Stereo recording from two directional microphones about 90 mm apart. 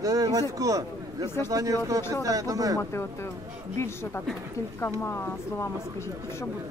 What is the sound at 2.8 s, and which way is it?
Speech, 30° left (ahead or behind).